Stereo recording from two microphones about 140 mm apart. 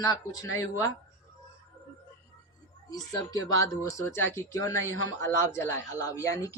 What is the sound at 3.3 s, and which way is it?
Speech, 20° left (ahead or behind).